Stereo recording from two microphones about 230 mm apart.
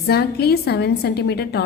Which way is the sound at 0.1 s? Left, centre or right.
Left.